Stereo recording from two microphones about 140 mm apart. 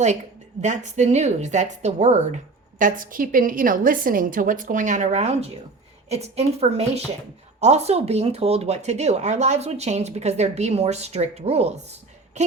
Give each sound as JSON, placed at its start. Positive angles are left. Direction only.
{"t": 0.6, "sound": "a woman's voice", "side_deg": -60}
{"t": 2.7, "sound": "a woman's voice", "side_deg": -70}